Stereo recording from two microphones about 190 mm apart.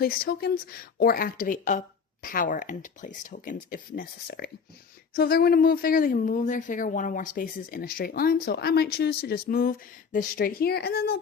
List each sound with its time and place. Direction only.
0.0 s speech: 50° left (ahead or behind)